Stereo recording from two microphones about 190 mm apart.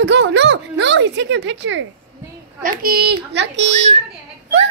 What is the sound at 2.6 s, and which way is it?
Speech, 50° right (ahead or behind).